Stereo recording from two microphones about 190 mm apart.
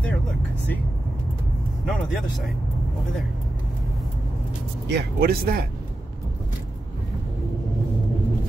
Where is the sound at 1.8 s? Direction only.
Centre (ahead or behind).